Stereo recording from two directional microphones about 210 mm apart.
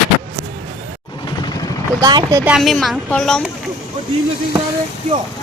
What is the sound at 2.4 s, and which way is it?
Speech, centre (ahead or behind).